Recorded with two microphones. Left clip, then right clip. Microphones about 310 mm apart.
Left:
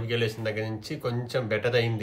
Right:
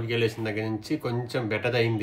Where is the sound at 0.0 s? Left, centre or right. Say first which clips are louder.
Right 1 dB; centre.